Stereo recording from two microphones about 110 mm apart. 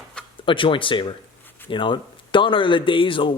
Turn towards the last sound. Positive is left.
turn(degrees=50)  # may be behind; listen again after turning